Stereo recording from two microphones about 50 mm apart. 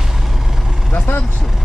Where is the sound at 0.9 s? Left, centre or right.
Left.